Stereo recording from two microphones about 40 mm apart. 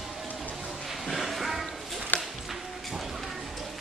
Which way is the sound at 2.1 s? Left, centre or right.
Left.